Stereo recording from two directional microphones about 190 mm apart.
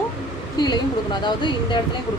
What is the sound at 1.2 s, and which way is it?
Speech, 25° left (ahead or behind).